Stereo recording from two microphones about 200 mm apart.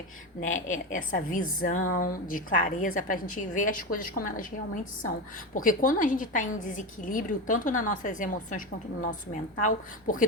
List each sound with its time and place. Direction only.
0.4 s a woman's voice: 40° left (ahead or behind)